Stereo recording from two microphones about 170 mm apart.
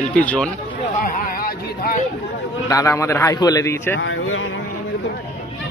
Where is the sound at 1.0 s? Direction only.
55° left (ahead or behind).